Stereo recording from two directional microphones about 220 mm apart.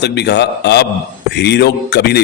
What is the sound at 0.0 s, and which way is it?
A man's voice, 50° left (ahead or behind).